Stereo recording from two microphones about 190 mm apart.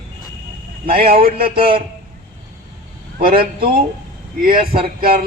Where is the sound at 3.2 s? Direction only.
50° right (ahead or behind).